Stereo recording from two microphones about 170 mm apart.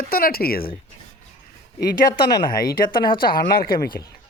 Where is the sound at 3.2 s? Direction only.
60° left (ahead or behind).